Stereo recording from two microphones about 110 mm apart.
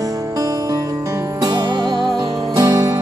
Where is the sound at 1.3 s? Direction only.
40° right (ahead or behind).